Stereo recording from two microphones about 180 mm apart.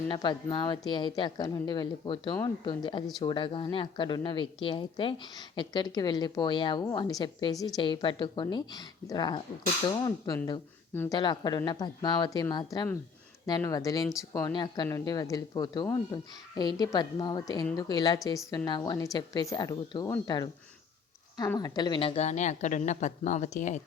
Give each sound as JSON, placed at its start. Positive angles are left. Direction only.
{"t": 0.1, "sound": "a woman's voice", "side_deg": 25}